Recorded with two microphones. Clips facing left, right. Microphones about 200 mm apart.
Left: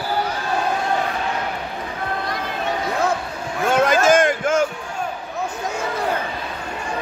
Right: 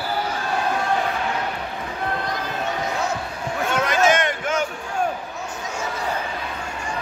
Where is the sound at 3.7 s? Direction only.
50° left (ahead or behind).